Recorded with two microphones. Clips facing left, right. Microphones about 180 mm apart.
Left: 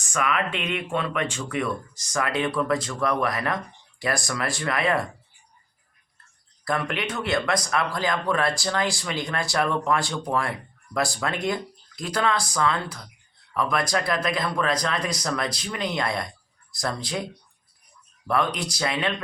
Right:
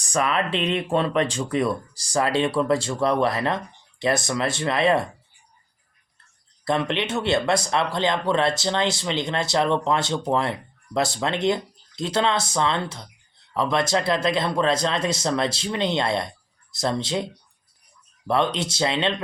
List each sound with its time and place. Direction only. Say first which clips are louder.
0.0 s speech: right 3 dB; 35° right (ahead or behind)
6.7 s speech: right 4 dB; 25° right (ahead or behind)
18.3 s speech: right 3 dB; 25° right (ahead or behind)